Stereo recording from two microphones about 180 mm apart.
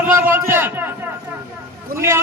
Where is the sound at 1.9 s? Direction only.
15° right (ahead or behind).